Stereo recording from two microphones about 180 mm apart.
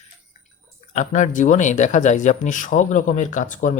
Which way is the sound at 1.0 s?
45° left (ahead or behind).